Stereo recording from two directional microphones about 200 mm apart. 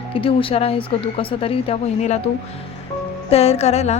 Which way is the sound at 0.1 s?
25° left (ahead or behind).